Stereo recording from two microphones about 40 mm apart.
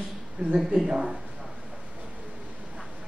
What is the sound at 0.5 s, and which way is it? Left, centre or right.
Speech, centre.